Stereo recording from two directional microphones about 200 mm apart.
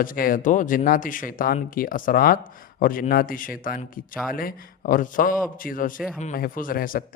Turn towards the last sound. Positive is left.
turn(degrees=45)  # may be behind; listen again after turning